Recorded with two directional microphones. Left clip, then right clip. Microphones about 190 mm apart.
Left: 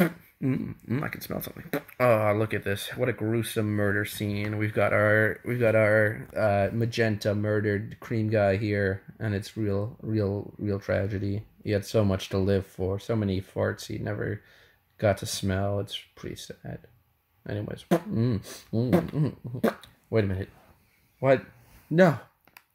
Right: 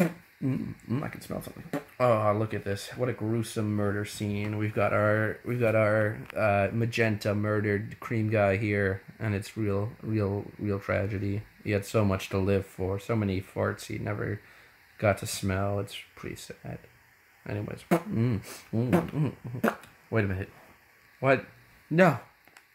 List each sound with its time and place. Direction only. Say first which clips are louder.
0.8 s speech: left 3 dB; 30° left (ahead or behind)
1.1 s speech: left 3 dB; 20° left (ahead or behind)